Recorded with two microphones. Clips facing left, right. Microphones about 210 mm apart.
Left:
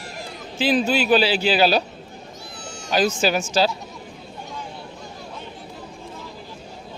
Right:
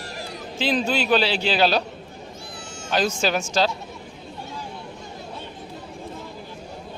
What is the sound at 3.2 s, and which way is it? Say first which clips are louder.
Speech: left 2 dB; 5° left (ahead or behind).